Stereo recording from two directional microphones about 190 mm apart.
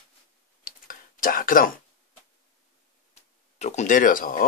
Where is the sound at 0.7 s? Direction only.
45° left (ahead or behind).